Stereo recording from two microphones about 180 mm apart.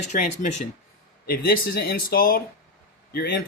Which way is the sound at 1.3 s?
55° left (ahead or behind).